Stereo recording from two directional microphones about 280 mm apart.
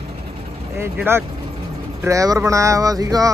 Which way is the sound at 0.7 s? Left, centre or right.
Centre.